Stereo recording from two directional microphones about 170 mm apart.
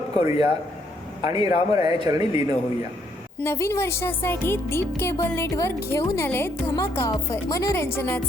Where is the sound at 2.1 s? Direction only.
20° right (ahead or behind).